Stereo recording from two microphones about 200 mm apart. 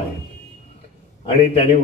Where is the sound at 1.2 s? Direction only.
30° left (ahead or behind).